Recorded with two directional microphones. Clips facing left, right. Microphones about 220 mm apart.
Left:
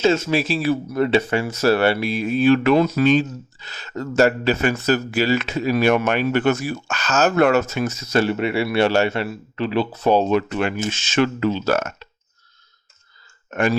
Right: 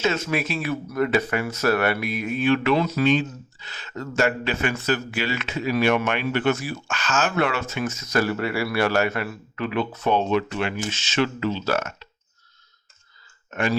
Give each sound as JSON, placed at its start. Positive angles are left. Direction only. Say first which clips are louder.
{"t": 0.0, "sound": "speech", "louder": "left 6 dB", "side_deg": 30}
{"t": 13.5, "sound": "speech", "louder": "left 4 dB", "side_deg": 50}